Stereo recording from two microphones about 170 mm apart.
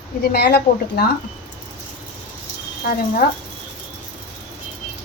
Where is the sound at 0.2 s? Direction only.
70° left (ahead or behind).